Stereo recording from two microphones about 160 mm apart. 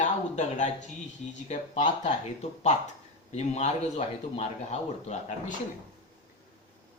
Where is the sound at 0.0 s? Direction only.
50° left (ahead or behind).